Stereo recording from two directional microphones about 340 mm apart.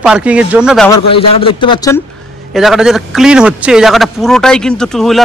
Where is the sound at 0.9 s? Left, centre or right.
Centre.